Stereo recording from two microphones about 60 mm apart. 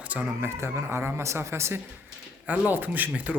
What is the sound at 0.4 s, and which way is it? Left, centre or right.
Speech, right.